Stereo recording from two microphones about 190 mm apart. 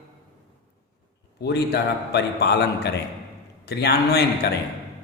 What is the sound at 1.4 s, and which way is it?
A man's voice, 60° left (ahead or behind).